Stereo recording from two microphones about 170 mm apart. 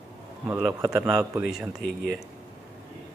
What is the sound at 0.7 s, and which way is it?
Speech, 20° right (ahead or behind).